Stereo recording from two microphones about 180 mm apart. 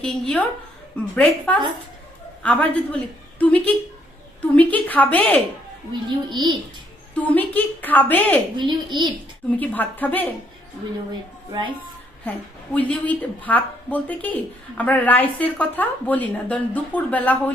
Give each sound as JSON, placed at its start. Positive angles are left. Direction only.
{"t": 0.0, "sound": "a woman's voice", "side_deg": 5}
{"t": 5.9, "sound": "a child's voice", "side_deg": -25}
{"t": 7.2, "sound": "a woman's voice", "side_deg": 10}
{"t": 8.5, "sound": "a child's voice", "side_deg": -25}
{"t": 9.5, "sound": "a woman's voice", "side_deg": 10}
{"t": 12.7, "sound": "a woman's voice", "side_deg": 10}